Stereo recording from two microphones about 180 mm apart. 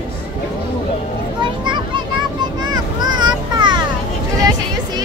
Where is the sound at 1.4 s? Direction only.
25° right (ahead or behind).